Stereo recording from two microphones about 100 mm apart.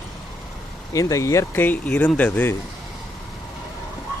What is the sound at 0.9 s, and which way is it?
A man's voice, 35° left (ahead or behind).